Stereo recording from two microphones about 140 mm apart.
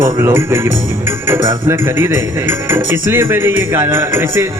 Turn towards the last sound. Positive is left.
turn(degrees=-20)  # may be behind; listen again after turning